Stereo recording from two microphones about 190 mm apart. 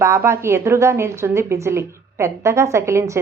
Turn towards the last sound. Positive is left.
turn(degrees=-15)  # may be behind; listen again after turning